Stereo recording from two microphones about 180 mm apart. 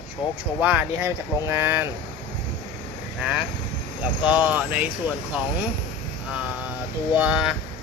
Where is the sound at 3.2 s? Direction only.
5° right (ahead or behind).